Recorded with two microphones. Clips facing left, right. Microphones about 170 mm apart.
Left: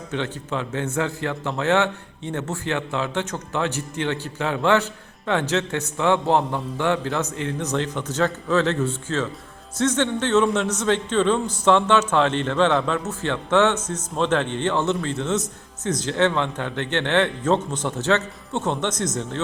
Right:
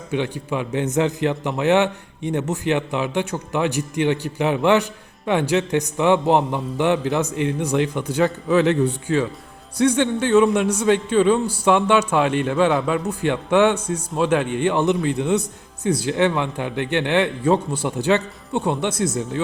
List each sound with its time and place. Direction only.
0.1 s a man's voice: 15° right (ahead or behind)